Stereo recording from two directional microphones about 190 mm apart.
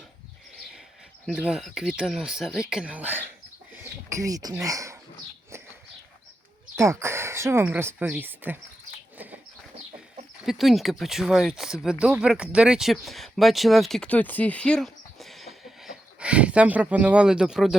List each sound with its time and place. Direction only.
1.3 s speech: 5° right (ahead or behind)
6.7 s speech: 15° right (ahead or behind)
9.1 s bird: 10° right (ahead or behind)
10.4 s speech: centre (ahead or behind)